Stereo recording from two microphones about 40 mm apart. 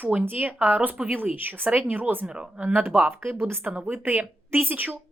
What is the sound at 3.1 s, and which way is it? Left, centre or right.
Speech, right.